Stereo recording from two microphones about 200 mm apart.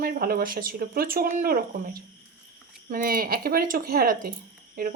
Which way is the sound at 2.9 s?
45° right (ahead or behind).